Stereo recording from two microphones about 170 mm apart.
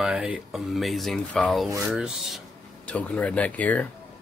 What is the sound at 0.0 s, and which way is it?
Speech, 5° right (ahead or behind).